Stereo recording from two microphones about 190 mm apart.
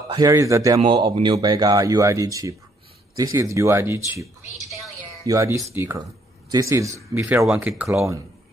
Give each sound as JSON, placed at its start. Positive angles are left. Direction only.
{"t": 0.1, "sound": "speech", "side_deg": -20}